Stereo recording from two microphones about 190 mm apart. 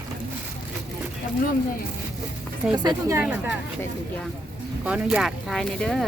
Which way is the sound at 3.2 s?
10° right (ahead or behind).